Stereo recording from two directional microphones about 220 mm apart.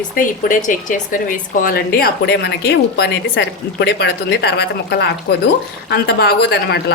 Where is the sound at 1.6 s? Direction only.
40° left (ahead or behind).